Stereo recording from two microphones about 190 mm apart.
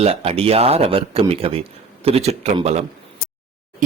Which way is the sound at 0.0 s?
30° right (ahead or behind).